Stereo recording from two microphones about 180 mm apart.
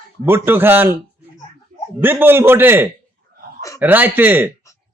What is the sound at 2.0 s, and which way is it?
A man's voice, 10° right (ahead or behind).